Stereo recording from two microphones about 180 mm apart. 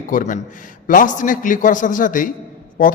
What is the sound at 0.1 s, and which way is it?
A man's voice, 45° left (ahead or behind).